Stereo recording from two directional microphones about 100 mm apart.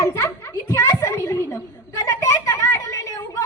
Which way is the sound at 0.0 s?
30° left (ahead or behind).